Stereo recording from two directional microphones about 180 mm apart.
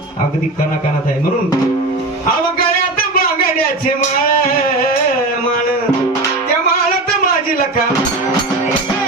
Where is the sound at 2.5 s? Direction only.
55° left (ahead or behind).